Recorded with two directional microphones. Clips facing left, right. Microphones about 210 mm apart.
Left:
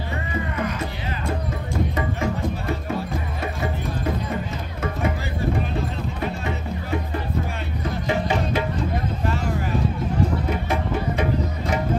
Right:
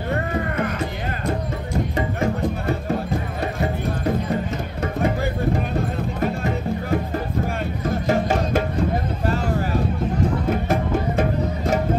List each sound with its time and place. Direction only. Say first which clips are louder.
0.1 s music: right 5 dB; 55° right (ahead or behind)
6.2 s music: right 5 dB; 45° right (ahead or behind)
8.1 s music: right 3 dB; 45° right (ahead or behind)
10.5 s music: right 3 dB; 45° right (ahead or behind)